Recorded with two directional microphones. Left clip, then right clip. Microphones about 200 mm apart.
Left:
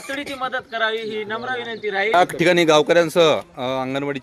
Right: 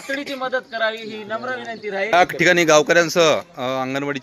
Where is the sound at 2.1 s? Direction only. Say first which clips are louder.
Right 2 dB; 5° left (ahead or behind).